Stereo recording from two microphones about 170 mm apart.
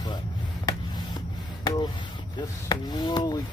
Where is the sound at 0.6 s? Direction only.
25° left (ahead or behind).